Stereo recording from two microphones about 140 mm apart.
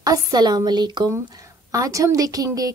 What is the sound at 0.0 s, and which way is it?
A woman's voice, 30° right (ahead or behind).